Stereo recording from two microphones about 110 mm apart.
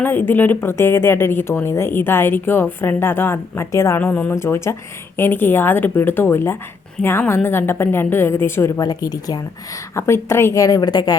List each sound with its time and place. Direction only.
0.0 s a woman's voice: 20° left (ahead or behind)
8.8 s a woman's voice: 35° left (ahead or behind)